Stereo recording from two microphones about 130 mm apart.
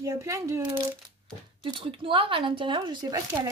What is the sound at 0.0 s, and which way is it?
Speech, 25° right (ahead or behind).